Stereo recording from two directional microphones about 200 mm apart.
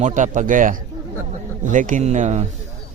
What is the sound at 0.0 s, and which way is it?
Speech, 40° right (ahead or behind).